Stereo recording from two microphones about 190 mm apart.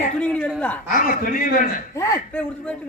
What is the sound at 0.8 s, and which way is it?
Speech, 45° left (ahead or behind).